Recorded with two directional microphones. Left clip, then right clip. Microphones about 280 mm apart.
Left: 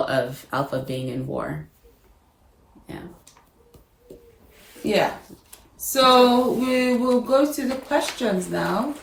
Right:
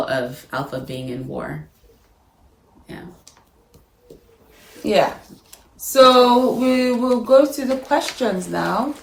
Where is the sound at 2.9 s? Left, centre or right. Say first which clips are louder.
Right 1 dB; centre.